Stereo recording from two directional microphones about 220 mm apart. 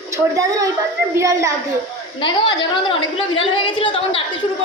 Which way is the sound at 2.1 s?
20° left (ahead or behind).